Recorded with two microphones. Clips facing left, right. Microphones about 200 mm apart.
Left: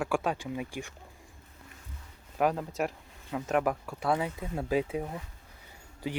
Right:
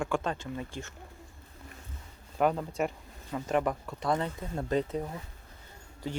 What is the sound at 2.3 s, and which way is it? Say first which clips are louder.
Speech: right 1 dB; 5° left (ahead or behind).